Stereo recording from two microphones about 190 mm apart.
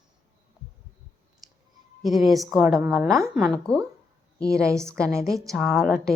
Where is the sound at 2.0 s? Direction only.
Centre (ahead or behind).